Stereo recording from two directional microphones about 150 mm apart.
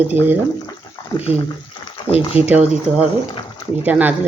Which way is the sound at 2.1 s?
40° left (ahead or behind).